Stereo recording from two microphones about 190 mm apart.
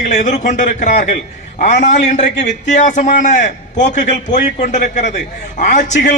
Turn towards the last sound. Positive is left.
turn(degrees=40)  # may be behind; listen again after turning